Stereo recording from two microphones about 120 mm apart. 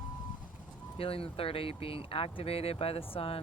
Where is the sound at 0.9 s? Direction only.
50° left (ahead or behind).